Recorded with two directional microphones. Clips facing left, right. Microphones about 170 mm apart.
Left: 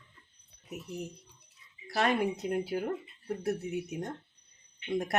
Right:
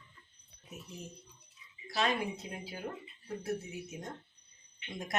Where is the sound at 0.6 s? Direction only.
70° left (ahead or behind).